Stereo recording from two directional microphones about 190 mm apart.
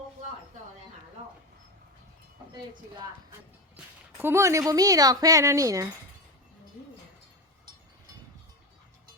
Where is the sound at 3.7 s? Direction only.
10° right (ahead or behind).